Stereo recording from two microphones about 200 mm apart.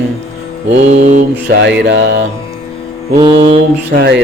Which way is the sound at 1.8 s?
65° right (ahead or behind).